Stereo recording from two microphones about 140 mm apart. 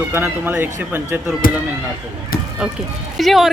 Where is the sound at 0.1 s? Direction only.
15° right (ahead or behind).